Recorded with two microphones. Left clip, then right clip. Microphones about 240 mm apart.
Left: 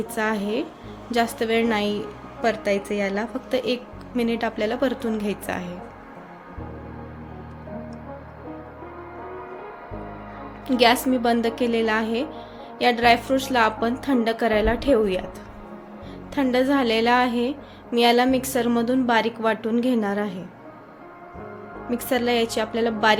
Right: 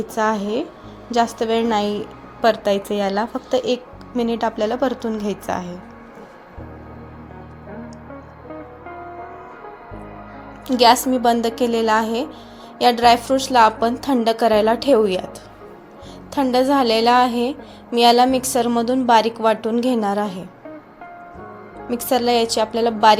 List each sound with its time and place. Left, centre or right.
0.2 s a woman's voice: centre
10.7 s a woman's voice: centre
16.3 s a woman's voice: centre
21.8 s a woman's voice: centre